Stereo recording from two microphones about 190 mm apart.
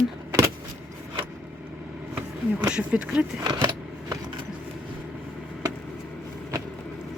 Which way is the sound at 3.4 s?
20° right (ahead or behind).